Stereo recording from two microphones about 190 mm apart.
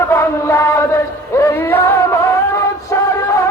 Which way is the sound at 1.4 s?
15° left (ahead or behind).